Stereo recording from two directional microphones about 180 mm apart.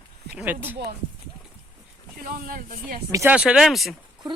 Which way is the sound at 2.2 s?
55° right (ahead or behind).